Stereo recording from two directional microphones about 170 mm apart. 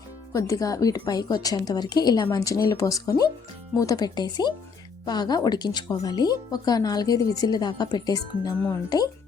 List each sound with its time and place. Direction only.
0.3 s speech: 20° left (ahead or behind)